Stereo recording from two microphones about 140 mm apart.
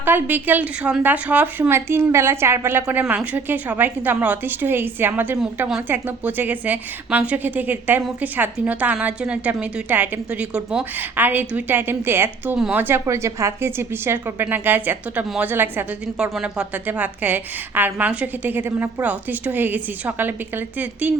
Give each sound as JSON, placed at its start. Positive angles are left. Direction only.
{"t": 0.0, "sound": "a woman's voice", "side_deg": -15}
{"t": 12.5, "sound": "speech", "side_deg": -5}
{"t": 12.8, "sound": "a woman's voice", "side_deg": -20}